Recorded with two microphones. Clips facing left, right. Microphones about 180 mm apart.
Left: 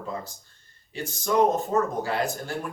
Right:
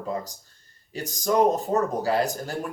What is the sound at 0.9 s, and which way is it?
Speech, 40° right (ahead or behind).